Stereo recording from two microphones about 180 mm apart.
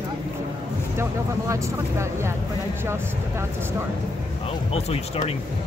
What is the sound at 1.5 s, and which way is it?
Speech, 15° right (ahead or behind).